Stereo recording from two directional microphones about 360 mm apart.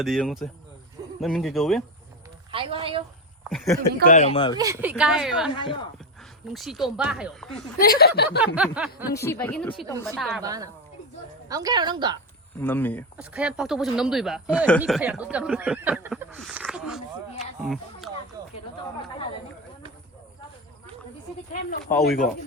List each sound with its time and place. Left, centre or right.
0.0 s speech: centre
2.5 s a woman's voice: centre
3.4 s speech: centre
4.0 s speech: centre
4.5 s speech: centre
5.5 s speech: centre
6.5 s speech: centre
7.8 s speech: left
8.4 s a woman's voice: centre
12.5 s speech: centre
18.4 s a sound: centre
21.8 s speech: centre